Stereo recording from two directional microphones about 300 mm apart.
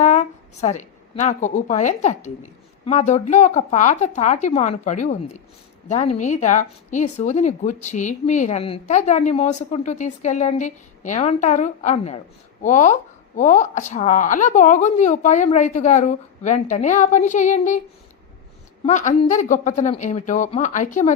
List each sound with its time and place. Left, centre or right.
0.0 s a woman's voice: left
6.1 s a woman's voice: left
18.9 s a woman's voice: left